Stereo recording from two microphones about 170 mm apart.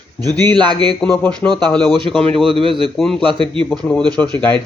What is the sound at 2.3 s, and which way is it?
Speech, 30° right (ahead or behind).